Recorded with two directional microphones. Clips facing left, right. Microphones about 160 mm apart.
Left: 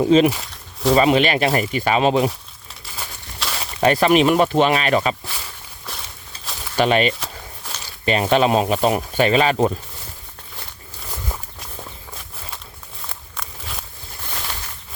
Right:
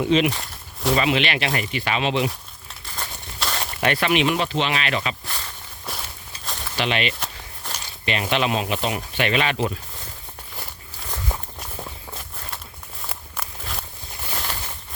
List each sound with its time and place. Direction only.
0.0 s speech: 40° left (ahead or behind)
0.3 s a sound: centre (ahead or behind)
0.9 s speech: 40° left (ahead or behind)
2.9 s a sound: 5° left (ahead or behind)
3.8 s speech: 35° left (ahead or behind)
5.9 s walk: centre (ahead or behind)
6.7 s speech: 45° left (ahead or behind)
7.6 s a sound: 5° left (ahead or behind)
8.0 s speech: 40° left (ahead or behind)
13.1 s walk: 5° right (ahead or behind)